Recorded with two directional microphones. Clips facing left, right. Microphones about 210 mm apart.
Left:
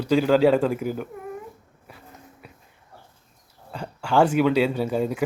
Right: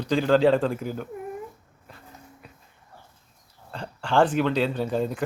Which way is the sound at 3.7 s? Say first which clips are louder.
Left 2 dB; 10° left (ahead or behind).